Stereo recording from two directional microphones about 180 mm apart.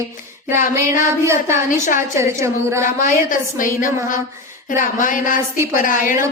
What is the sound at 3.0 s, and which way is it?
A woman's voice, 45° left (ahead or behind).